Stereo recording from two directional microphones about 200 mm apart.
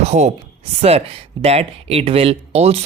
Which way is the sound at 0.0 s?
35° right (ahead or behind).